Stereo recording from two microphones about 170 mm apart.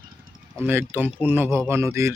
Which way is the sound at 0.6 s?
10° right (ahead or behind).